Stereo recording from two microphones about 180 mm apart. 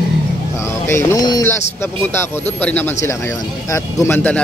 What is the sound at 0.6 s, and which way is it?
Speech, 15° left (ahead or behind).